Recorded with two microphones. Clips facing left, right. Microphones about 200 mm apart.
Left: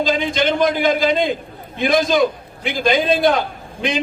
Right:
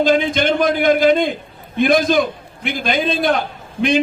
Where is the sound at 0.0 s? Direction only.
55° right (ahead or behind).